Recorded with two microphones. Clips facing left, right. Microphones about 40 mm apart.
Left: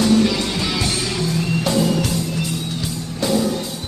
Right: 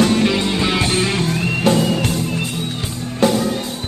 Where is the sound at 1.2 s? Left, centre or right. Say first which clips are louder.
Right 3 dB; right.